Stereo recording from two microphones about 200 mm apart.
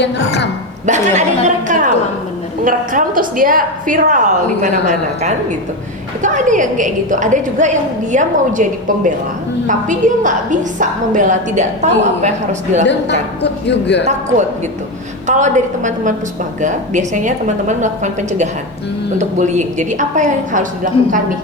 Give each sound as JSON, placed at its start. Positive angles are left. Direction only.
{"t": 0.0, "sound": "a woman's voice", "side_deg": 60}
{"t": 0.9, "sound": "a woman's voice", "side_deg": -35}
{"t": 6.2, "sound": "a woman's voice", "side_deg": -40}
{"t": 9.6, "sound": "a woman's voice", "side_deg": -40}
{"t": 12.9, "sound": "a woman's voice", "side_deg": 60}
{"t": 14.1, "sound": "a woman's voice", "side_deg": -35}